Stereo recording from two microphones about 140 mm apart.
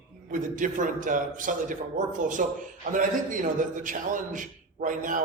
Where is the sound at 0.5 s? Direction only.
70° right (ahead or behind).